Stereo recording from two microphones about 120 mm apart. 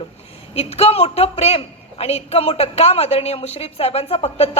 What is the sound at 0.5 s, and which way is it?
A man's voice, 55° left (ahead or behind).